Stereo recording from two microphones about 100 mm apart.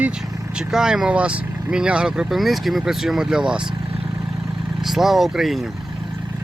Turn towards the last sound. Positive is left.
turn(degrees=0)  # may be behind; listen again after turning